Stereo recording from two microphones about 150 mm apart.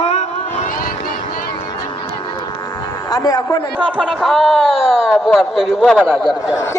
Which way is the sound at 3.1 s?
25° left (ahead or behind).